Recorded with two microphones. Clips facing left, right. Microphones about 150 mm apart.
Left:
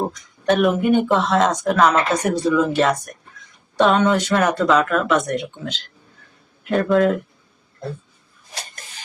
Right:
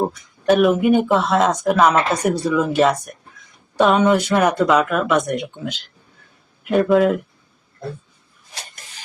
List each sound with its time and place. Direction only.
0.1 s speech: 5° right (ahead or behind)